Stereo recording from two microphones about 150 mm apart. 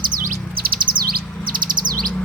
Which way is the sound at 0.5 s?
90° right.